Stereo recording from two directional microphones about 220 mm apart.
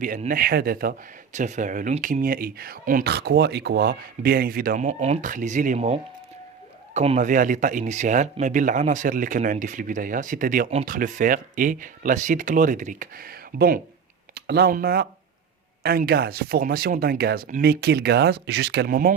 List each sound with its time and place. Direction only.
0.0 s speech: 35° right (ahead or behind)